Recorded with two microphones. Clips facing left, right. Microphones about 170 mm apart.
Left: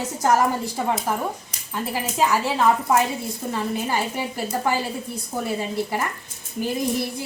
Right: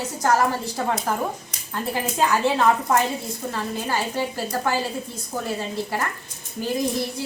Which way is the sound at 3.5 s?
15° left (ahead or behind).